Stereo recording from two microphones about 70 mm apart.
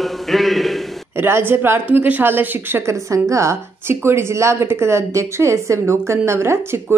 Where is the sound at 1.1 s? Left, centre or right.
Right.